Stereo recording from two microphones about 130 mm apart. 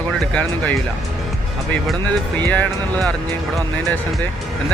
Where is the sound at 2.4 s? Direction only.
15° left (ahead or behind).